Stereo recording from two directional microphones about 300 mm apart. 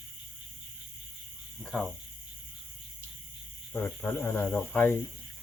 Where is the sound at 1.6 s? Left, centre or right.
Centre.